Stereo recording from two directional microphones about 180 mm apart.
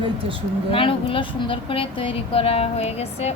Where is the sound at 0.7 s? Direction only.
30° left (ahead or behind).